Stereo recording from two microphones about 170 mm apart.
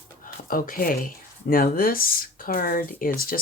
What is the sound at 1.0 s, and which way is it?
Speech, 55° left (ahead or behind).